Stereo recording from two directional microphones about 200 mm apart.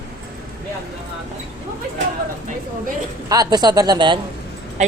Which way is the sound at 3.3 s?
20° right (ahead or behind).